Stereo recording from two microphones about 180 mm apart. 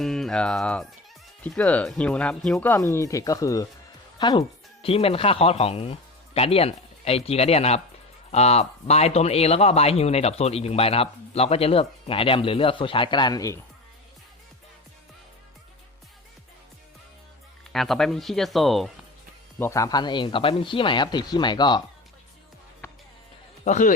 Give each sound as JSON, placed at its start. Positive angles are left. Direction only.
{"t": 0.0, "sound": "speech", "side_deg": 0}
{"t": 17.7, "sound": "speech", "side_deg": 0}
{"t": 19.5, "sound": "speech", "side_deg": 15}
{"t": 23.6, "sound": "speech", "side_deg": 45}